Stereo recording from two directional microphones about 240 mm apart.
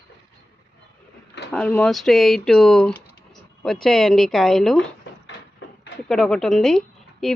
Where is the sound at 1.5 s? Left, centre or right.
Centre.